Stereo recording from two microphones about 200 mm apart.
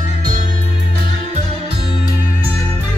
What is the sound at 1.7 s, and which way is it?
Music, 25° left (ahead or behind).